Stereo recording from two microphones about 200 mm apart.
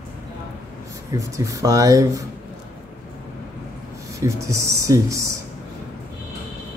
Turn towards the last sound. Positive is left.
turn(degrees=-15)  # may be behind; listen again after turning